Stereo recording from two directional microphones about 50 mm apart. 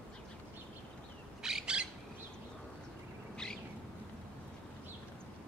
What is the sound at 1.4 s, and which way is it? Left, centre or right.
Bird, centre.